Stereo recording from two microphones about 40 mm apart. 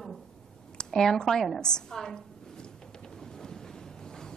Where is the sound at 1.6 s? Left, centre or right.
Centre.